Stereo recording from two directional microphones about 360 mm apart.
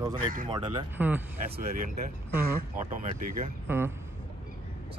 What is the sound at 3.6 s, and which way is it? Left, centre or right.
Speech, centre.